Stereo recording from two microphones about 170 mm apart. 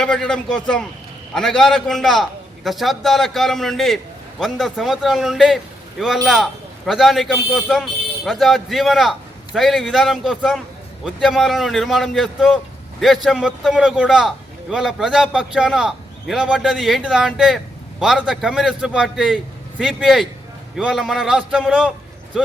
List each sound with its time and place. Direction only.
0.0 s a man's voice: 5° left (ahead or behind)